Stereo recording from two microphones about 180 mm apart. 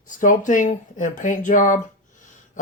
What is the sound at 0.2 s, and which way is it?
Speech, 45° left (ahead or behind).